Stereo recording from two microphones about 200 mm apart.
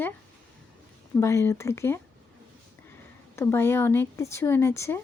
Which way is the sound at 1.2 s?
15° left (ahead or behind).